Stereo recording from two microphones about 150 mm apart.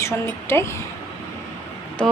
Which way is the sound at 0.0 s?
15° left (ahead or behind).